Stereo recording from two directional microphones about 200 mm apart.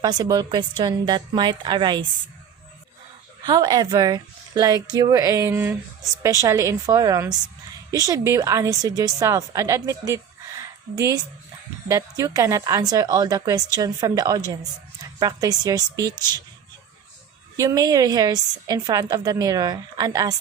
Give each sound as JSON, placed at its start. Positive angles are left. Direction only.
{"t": 0.0, "sound": "a woman's voice", "side_deg": -20}
{"t": 3.4, "sound": "a woman's voice", "side_deg": -20}
{"t": 11.9, "sound": "a woman's voice", "side_deg": -15}
{"t": 17.6, "sound": "a woman's voice", "side_deg": -15}